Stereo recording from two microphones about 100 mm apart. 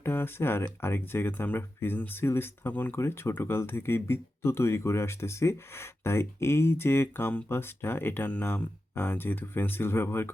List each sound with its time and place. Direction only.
0.0 s speech: 25° left (ahead or behind)